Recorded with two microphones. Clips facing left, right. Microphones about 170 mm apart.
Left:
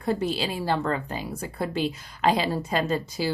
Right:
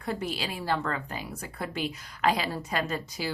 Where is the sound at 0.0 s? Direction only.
30° left (ahead or behind).